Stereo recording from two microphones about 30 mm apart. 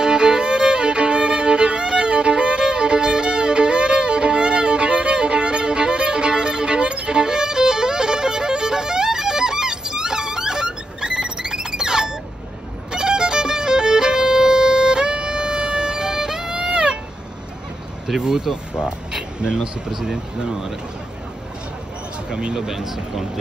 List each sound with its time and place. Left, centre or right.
0.0 s violin: right
18.2 s vehicle: centre
18.9 s a sound: right
19.9 s speech: centre
22.3 s speech: right
22.6 s speech: centre